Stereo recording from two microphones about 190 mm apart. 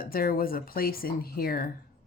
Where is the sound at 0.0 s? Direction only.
50° left (ahead or behind).